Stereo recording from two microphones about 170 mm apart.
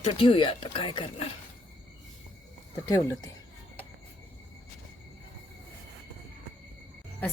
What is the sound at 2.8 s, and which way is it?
Speech, 20° left (ahead or behind).